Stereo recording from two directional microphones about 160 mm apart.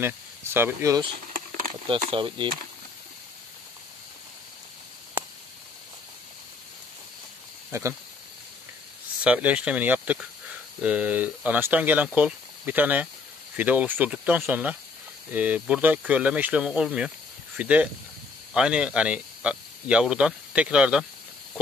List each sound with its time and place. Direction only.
0.0 s speech: 15° right (ahead or behind)
1.7 s speech: 35° right (ahead or behind)
9.2 s speech: 10° right (ahead or behind)